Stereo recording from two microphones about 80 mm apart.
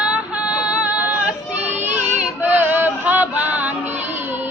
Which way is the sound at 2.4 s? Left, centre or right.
Right.